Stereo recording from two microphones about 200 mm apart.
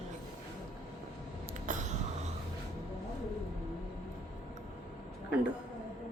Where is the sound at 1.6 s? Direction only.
40° right (ahead or behind).